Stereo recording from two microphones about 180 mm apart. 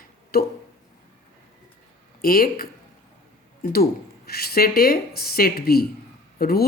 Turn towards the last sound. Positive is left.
turn(degrees=60)  # may be behind; listen again after turning